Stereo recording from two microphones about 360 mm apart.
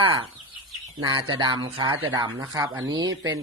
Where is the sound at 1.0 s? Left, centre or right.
Centre.